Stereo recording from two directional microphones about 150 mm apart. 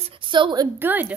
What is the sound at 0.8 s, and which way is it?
Speech, 10° right (ahead or behind).